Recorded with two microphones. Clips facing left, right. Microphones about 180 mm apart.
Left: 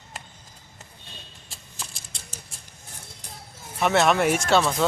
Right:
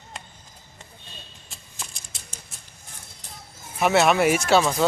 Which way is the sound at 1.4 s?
Centre (ahead or behind).